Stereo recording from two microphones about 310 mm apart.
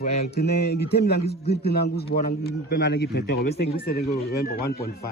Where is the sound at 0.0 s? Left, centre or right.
Left.